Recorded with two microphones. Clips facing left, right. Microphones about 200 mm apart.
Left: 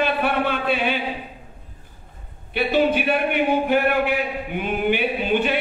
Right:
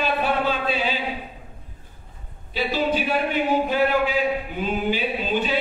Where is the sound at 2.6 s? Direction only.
60° left (ahead or behind).